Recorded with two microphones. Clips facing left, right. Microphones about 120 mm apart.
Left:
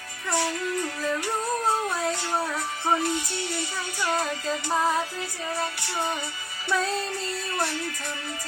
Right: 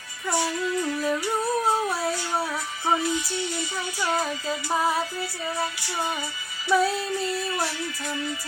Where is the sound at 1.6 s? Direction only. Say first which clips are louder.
Right 1 dB; 5° right (ahead or behind).